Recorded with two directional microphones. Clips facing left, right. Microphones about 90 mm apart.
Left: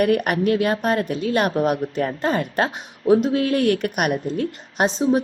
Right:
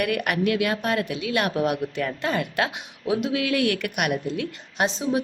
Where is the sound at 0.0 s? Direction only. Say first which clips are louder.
Left 5 dB; 40° left (ahead or behind).